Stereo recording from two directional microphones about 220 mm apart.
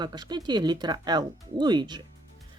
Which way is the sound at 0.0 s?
20° right (ahead or behind).